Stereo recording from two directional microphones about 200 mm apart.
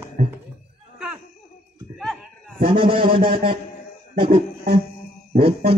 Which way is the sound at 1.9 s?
Centre (ahead or behind).